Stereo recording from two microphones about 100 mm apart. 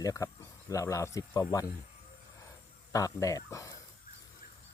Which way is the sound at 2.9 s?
35° left (ahead or behind).